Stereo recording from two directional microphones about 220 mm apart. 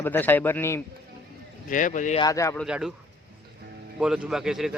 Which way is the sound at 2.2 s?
15° left (ahead or behind).